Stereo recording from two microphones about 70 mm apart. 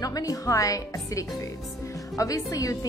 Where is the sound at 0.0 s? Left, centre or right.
Left.